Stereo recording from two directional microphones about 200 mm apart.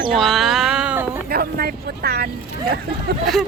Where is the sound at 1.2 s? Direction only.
50° right (ahead or behind).